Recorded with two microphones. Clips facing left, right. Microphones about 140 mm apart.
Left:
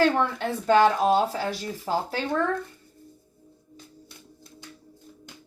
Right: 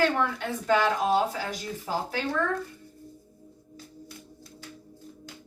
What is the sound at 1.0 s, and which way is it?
Speech, 35° left (ahead or behind).